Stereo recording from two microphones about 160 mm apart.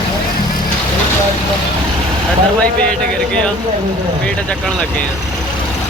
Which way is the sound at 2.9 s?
5° left (ahead or behind).